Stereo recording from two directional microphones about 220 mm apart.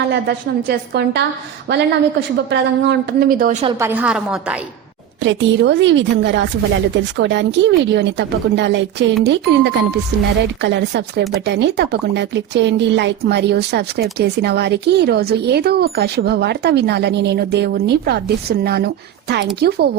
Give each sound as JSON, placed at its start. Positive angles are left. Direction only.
{"t": 0.1, "sound": "speech", "side_deg": -50}
{"t": 3.8, "sound": "a woman's voice", "side_deg": -10}
{"t": 5.2, "sound": "speech", "side_deg": -55}